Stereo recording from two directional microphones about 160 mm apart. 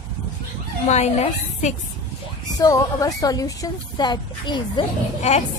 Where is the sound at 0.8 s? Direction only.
45° left (ahead or behind).